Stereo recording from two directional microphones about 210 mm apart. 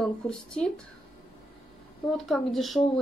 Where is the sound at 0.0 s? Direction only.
5° left (ahead or behind).